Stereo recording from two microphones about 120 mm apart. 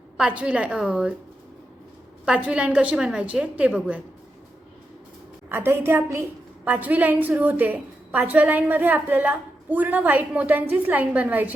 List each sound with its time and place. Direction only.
0.2 s a woman's voice: 10° right (ahead or behind)
2.2 s a woman's voice: 10° right (ahead or behind)
5.5 s a woman's voice: 20° right (ahead or behind)